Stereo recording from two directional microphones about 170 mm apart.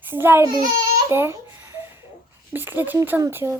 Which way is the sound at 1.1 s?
15° right (ahead or behind).